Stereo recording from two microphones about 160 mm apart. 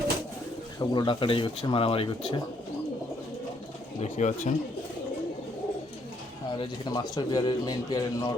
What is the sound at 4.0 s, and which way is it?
Speech, 50° left (ahead or behind).